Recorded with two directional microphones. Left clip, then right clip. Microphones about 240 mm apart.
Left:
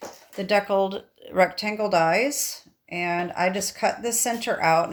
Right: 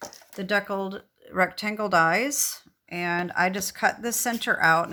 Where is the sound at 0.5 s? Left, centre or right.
Centre.